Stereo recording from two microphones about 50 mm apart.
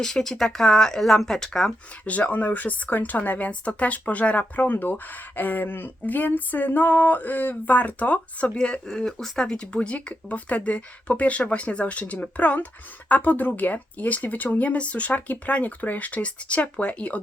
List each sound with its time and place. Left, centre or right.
0.0 s speech: centre
2.0 s speech: left
8.5 s speech: centre